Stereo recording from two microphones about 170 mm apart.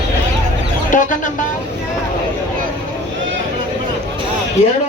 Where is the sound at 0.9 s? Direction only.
50° left (ahead or behind).